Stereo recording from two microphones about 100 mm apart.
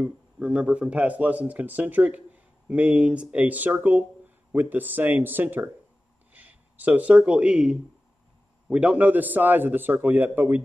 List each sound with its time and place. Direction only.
0.0 s speech: 10° right (ahead or behind)